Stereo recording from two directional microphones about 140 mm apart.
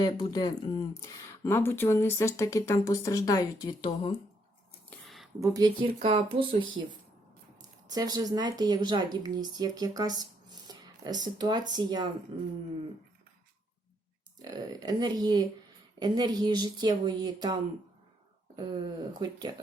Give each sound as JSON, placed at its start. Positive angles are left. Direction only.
{"t": 0.0, "sound": "speech", "side_deg": 30}
{"t": 4.9, "sound": "a sound", "side_deg": 0}
{"t": 5.4, "sound": "speech", "side_deg": -25}
{"t": 5.8, "sound": "speech", "side_deg": -40}
{"t": 7.9, "sound": "speech", "side_deg": -25}
{"t": 14.3, "sound": "speech", "side_deg": -30}